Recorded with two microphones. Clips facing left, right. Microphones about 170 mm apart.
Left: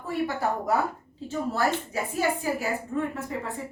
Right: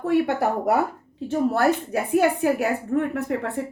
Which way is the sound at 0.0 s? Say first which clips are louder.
Right 7 dB; 70° right (ahead or behind).